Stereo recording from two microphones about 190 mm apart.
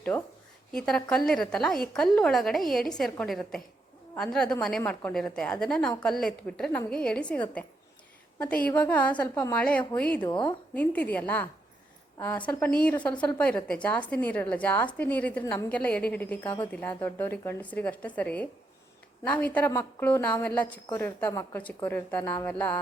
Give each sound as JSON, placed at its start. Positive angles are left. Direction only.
{"t": 0.1, "sound": "a woman's voice", "side_deg": 15}
{"t": 0.7, "sound": "a woman's voice", "side_deg": 5}
{"t": 10.2, "sound": "speech", "side_deg": 25}
{"t": 10.8, "sound": "a woman's voice", "side_deg": 10}